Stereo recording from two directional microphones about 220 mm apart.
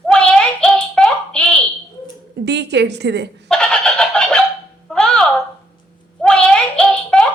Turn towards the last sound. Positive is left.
turn(degrees=5)  # may be behind; listen again after turning